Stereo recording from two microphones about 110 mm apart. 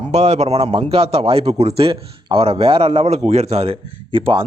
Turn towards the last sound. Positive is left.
turn(degrees=-55)  # may be behind; listen again after turning